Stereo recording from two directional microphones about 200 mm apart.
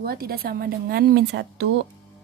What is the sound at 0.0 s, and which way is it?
A woman's voice, 50° right (ahead or behind).